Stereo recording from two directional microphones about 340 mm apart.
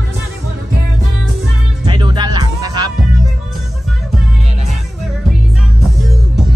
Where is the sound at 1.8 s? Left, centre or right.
Centre.